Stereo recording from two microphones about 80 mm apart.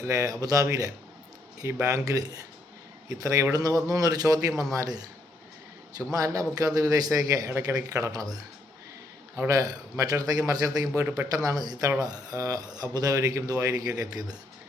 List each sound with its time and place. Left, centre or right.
0.0 s speech: right
6.1 s speech: right
9.5 s speech: right